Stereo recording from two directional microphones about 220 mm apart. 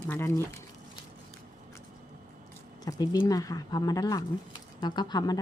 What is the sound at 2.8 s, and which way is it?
A woman's voice, 15° left (ahead or behind).